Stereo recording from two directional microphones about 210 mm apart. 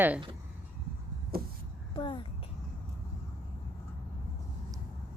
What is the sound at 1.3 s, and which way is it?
Vehicle, 45° right (ahead or behind).